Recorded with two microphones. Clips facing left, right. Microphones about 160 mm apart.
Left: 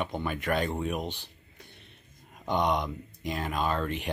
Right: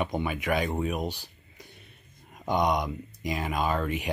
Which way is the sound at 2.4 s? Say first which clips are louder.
Right 2 dB; 10° right (ahead or behind).